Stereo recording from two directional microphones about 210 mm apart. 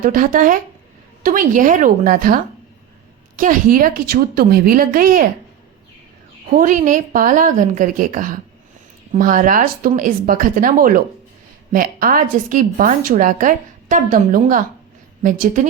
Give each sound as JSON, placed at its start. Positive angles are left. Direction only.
{"t": 0.0, "sound": "a woman's voice", "side_deg": -40}
{"t": 6.5, "sound": "a woman's voice", "side_deg": -35}